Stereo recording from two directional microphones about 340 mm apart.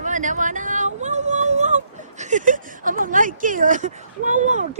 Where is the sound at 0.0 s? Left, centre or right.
Right.